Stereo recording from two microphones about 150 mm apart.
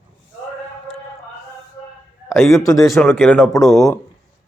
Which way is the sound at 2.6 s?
25° left (ahead or behind).